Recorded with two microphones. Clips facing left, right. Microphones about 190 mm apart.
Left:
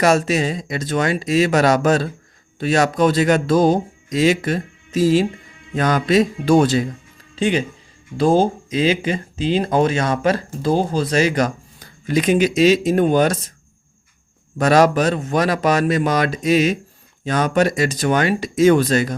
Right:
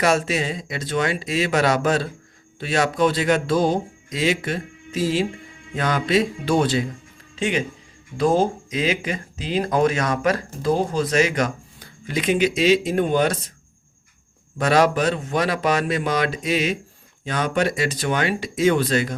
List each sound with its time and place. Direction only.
0.0 s speech: 40° left (ahead or behind)
7.3 s speech: 35° left (ahead or behind)
14.6 s speech: 45° left (ahead or behind)